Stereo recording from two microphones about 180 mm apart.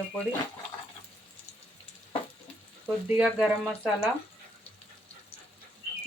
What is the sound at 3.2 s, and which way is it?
Speech, 5° right (ahead or behind).